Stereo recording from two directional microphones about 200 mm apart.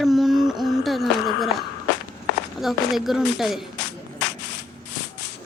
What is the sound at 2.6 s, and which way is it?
Speech, centre (ahead or behind).